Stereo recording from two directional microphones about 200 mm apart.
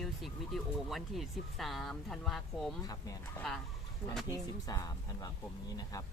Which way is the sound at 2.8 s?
20° left (ahead or behind).